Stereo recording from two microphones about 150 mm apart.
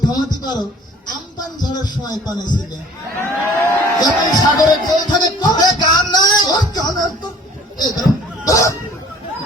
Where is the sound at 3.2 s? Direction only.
15° left (ahead or behind).